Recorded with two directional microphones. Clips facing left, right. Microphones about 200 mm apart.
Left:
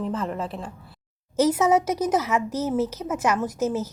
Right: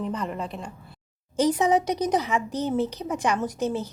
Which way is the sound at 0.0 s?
Centre (ahead or behind).